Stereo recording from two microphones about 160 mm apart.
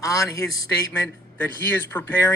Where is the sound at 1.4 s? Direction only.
10° left (ahead or behind).